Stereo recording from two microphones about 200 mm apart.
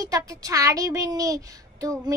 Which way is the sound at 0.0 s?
15° right (ahead or behind).